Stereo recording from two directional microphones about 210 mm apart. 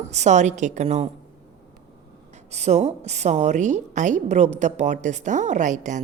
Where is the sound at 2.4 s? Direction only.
30° right (ahead or behind).